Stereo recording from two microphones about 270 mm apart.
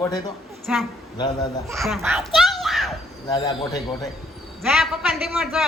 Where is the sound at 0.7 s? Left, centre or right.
Centre.